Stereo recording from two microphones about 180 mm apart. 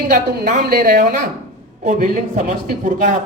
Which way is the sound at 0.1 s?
40° right (ahead or behind).